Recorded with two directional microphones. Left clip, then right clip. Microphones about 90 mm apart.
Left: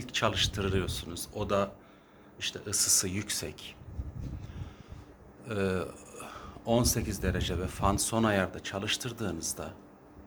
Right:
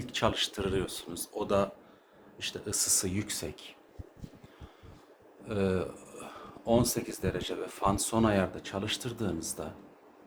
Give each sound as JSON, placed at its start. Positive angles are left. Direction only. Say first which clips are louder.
{"t": 0.0, "sound": "speech", "louder": "left 1 dB", "side_deg": -30}
{"t": 2.9, "sound": "speech", "louder": "left 2 dB", "side_deg": -20}
{"t": 5.5, "sound": "speech", "louder": "right 1 dB", "side_deg": -5}